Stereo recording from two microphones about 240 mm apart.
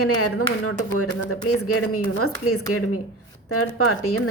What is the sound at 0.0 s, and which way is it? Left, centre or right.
Speech, left.